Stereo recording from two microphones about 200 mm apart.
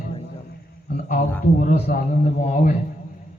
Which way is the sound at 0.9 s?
45° left (ahead or behind).